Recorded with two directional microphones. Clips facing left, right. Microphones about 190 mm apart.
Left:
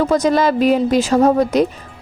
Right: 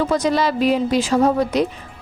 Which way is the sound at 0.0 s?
45° left (ahead or behind).